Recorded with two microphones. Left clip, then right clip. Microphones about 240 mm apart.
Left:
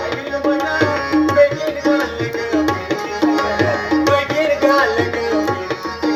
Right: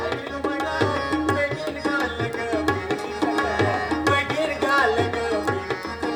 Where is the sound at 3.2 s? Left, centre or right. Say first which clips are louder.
Left 6 dB; right.